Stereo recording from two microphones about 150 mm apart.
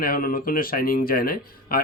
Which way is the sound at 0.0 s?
75° left (ahead or behind).